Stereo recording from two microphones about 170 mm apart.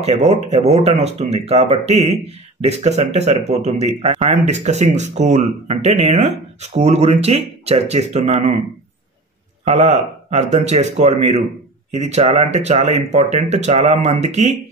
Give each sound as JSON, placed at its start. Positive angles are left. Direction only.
{"t": 0.3, "sound": "speech", "side_deg": -40}
{"t": 9.7, "sound": "speech", "side_deg": -40}